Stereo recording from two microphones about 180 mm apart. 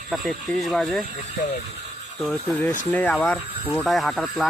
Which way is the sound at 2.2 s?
5° left (ahead or behind).